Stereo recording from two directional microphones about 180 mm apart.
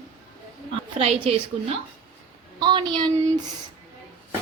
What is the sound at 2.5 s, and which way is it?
Speech, 25° right (ahead or behind).